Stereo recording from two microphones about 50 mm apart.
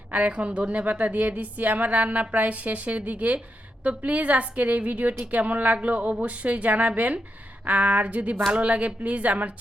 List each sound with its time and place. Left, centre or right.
0.1 s a woman's voice: right